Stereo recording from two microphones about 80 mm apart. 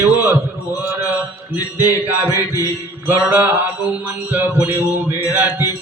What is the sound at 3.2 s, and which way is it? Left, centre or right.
Music, right.